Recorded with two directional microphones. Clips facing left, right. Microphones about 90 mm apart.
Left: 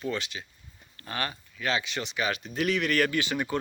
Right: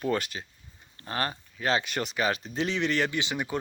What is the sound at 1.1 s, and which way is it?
Speech, 35° right (ahead or behind).